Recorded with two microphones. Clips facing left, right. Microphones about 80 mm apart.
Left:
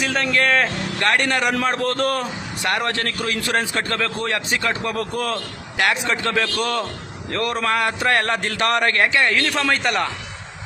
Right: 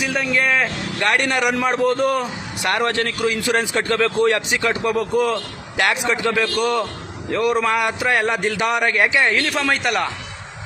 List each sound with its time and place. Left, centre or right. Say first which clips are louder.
0.0 s a man's voice: even; centre
9.4 s a man's voice: even; centre